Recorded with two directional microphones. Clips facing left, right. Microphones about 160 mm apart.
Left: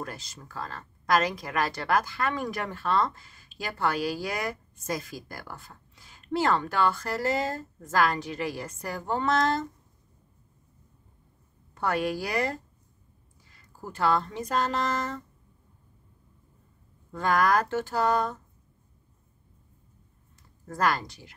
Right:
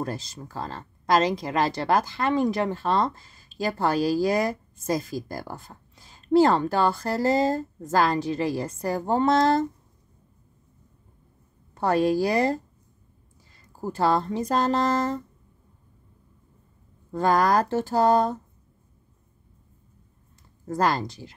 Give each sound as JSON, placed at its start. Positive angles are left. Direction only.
{"t": 0.0, "sound": "speech", "side_deg": -30}
{"t": 11.7, "sound": "speech", "side_deg": -30}
{"t": 17.1, "sound": "speech", "side_deg": -30}
{"t": 20.6, "sound": "speech", "side_deg": -30}